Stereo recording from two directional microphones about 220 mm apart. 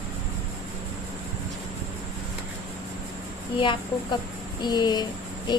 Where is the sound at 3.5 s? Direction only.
20° left (ahead or behind).